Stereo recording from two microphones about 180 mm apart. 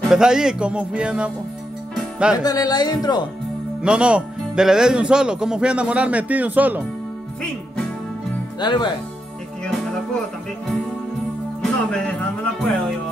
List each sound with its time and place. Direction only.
0.1 s speech: 5° right (ahead or behind)
2.0 s music: 5° right (ahead or behind)
2.3 s speech: 20° left (ahead or behind)
3.8 s speech: 5° right (ahead or behind)
8.5 s speech: 25° left (ahead or behind)
11.6 s speech: 5° left (ahead or behind)